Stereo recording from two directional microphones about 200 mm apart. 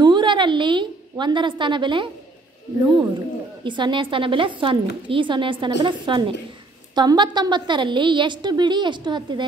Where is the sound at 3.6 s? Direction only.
25° right (ahead or behind).